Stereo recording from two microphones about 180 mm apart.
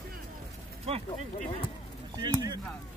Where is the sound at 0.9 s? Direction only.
35° right (ahead or behind).